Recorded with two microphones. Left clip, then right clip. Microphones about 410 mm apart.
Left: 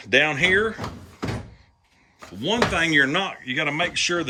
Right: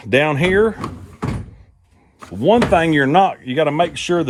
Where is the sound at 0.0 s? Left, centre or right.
Centre.